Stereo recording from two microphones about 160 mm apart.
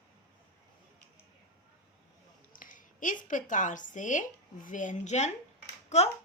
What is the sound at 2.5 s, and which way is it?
A woman's voice, 60° left (ahead or behind).